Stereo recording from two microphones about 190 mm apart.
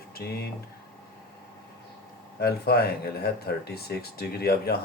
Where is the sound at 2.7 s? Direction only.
55° left (ahead or behind).